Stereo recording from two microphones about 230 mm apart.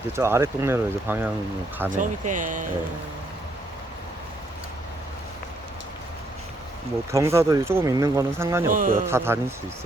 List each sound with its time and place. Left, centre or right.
0.2 s speech: centre
1.9 s speech: right
7.1 s speech: centre
8.7 s speech: right
9.0 s speech: centre